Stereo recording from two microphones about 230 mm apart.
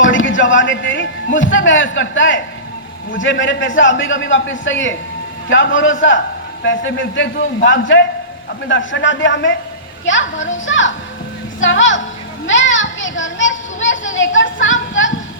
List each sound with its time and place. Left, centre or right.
0.0 s a man's voice: left